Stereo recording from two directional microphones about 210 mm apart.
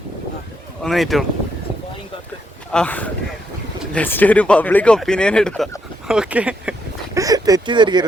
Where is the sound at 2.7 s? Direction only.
5° left (ahead or behind).